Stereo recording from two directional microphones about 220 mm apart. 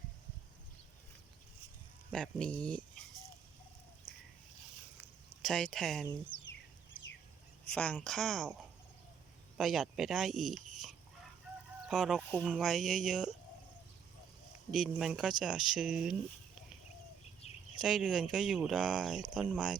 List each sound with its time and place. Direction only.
2.0 s speech: 5° left (ahead or behind)
4.9 s a sound: centre (ahead or behind)
7.7 s speech: 5° left (ahead or behind)
9.6 s speech: centre (ahead or behind)
14.7 s speech: centre (ahead or behind)
17.4 s bird: 30° left (ahead or behind)
17.8 s speech: centre (ahead or behind)